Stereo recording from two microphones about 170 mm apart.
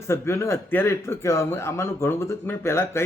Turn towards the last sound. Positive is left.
turn(degrees=15)  # may be behind; listen again after turning